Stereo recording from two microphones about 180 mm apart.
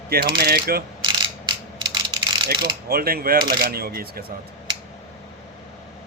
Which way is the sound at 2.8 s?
55° right (ahead or behind).